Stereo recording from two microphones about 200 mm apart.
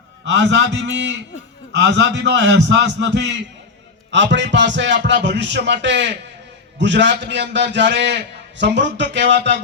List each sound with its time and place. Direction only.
0.3 s a man's voice: 65° right (ahead or behind)